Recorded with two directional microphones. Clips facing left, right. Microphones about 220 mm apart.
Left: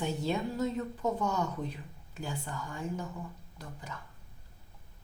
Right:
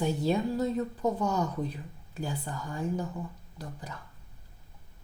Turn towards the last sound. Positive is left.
turn(degrees=-35)  # may be behind; listen again after turning